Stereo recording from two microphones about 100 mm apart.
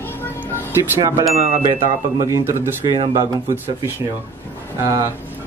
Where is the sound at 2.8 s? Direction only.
50° right (ahead or behind).